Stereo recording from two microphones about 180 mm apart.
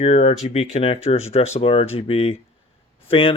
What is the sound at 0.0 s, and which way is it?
Speech, 40° left (ahead or behind).